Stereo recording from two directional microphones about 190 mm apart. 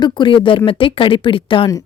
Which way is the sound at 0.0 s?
25° left (ahead or behind).